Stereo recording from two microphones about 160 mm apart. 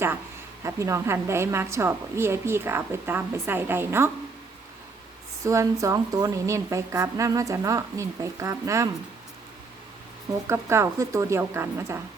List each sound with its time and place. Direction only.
0.6 s a woman's voice: 20° right (ahead or behind)
5.4 s speech: 20° right (ahead or behind)
10.4 s a woman's voice: 15° right (ahead or behind)